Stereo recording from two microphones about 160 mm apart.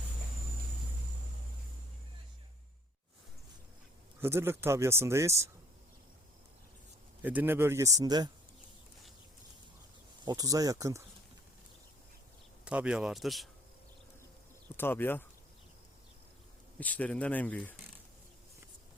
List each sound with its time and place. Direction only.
4.2 s speech: 15° right (ahead or behind)
7.2 s speech: 10° right (ahead or behind)
10.2 s speech: 25° right (ahead or behind)
12.6 s a man's voice: 5° right (ahead or behind)
14.8 s speech: 15° left (ahead or behind)
16.8 s speech: 10° left (ahead or behind)